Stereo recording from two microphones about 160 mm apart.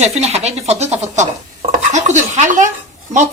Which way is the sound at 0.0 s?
40° right (ahead or behind).